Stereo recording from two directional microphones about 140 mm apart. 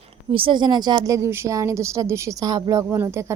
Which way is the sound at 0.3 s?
35° right (ahead or behind).